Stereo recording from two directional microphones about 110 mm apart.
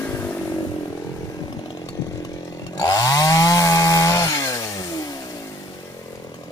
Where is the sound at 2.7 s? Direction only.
35° left (ahead or behind).